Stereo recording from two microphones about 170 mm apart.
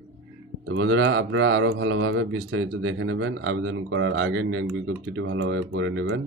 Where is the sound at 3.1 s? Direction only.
90° right.